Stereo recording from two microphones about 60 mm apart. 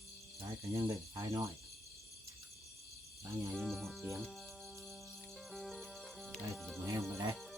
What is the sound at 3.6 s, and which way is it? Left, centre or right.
Speech, centre.